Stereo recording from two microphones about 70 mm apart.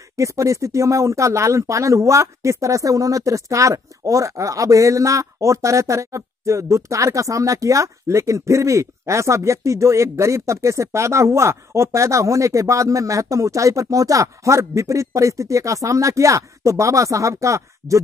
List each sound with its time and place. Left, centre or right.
0.1 s speech: right